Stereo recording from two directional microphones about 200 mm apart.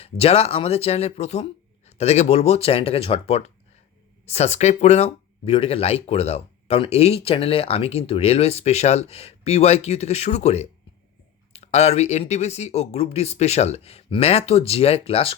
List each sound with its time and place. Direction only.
0.0 s speech: 30° left (ahead or behind)